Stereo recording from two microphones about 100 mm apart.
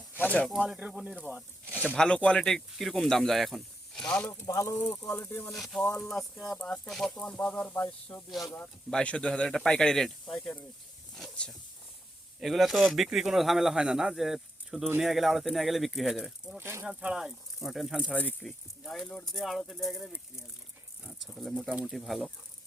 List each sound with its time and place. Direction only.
0.2 s snake: 15° left (ahead or behind)
0.7 s speech: 5° right (ahead or behind)
1.6 s a sound: 15° right (ahead or behind)
2.0 s speech: 10° left (ahead or behind)
4.3 s speech: 25° left (ahead or behind)
5.5 s speech: centre (ahead or behind)
5.8 s speech: 25° left (ahead or behind)
6.1 s speech: 5° left (ahead or behind)
7.2 s speech: 15° left (ahead or behind)
8.3 s speech: centre (ahead or behind)
16.6 s speech: 25° right (ahead or behind)
16.8 s speech: 10° right (ahead or behind)
18.0 s speech: 15° left (ahead or behind)